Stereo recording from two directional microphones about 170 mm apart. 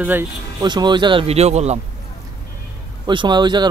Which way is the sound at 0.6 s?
25° right (ahead or behind).